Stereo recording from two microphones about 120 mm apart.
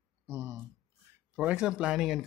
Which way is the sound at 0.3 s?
25° right (ahead or behind).